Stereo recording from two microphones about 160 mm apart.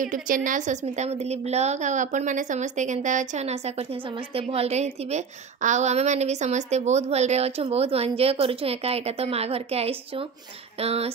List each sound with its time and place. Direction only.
0.0 s a woman's voice: 55° right (ahead or behind); by 11.1 s 40° right (ahead or behind)